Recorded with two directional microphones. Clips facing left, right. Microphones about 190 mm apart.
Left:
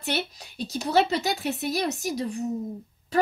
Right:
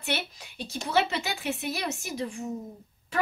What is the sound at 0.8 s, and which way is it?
Speech, 40° left (ahead or behind).